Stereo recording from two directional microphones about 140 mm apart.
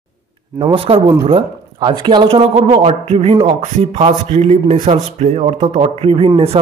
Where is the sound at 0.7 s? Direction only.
45° right (ahead or behind).